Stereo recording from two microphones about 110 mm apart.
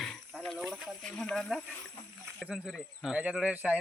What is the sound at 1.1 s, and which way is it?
Speech, 10° left (ahead or behind).